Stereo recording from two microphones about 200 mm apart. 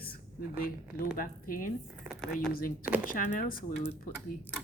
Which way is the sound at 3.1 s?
45° left (ahead or behind).